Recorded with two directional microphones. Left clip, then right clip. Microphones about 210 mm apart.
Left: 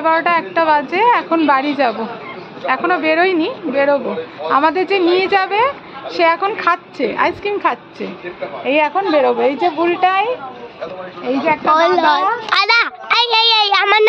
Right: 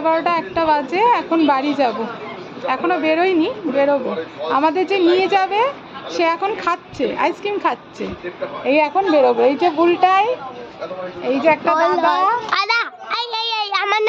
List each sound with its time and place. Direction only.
0.0 s a woman's voice: centre (ahead or behind)
11.4 s a woman's voice: 5° right (ahead or behind)
11.7 s a woman's voice: 10° left (ahead or behind)